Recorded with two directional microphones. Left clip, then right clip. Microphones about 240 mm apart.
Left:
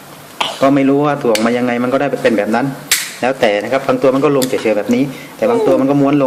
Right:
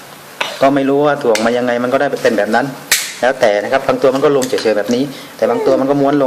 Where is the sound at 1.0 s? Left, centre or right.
Centre.